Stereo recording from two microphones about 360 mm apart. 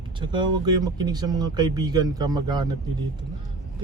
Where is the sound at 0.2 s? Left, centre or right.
Centre.